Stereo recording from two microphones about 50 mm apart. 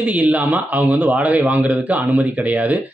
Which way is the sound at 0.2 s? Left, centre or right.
Right.